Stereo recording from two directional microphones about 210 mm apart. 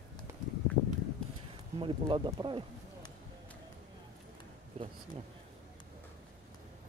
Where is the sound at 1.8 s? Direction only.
25° right (ahead or behind).